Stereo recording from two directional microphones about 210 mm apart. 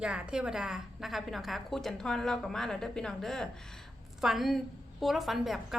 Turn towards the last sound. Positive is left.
turn(degrees=0)  # may be behind; listen again after turning